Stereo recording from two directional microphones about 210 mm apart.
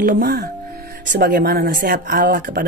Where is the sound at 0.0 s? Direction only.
45° right (ahead or behind).